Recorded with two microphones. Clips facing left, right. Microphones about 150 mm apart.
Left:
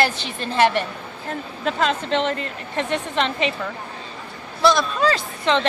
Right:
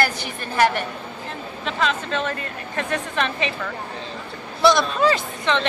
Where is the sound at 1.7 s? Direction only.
40° left (ahead or behind); by 3.5 s 20° left (ahead or behind).